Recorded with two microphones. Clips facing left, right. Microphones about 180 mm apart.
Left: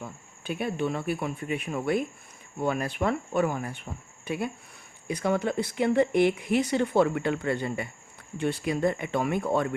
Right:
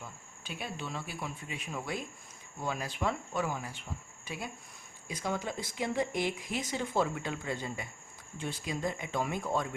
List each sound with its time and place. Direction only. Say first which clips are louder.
0.0 s speech: left 8 dB; 55° left (ahead or behind)